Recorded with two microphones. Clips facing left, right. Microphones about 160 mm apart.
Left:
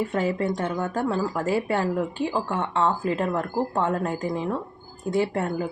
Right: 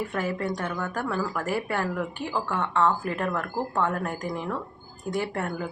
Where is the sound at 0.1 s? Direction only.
25° left (ahead or behind).